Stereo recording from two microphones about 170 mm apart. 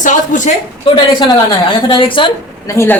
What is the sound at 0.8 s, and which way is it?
A woman's voice, 30° left (ahead or behind).